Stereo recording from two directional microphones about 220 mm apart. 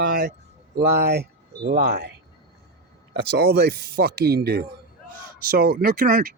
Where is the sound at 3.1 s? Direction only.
50° right (ahead or behind).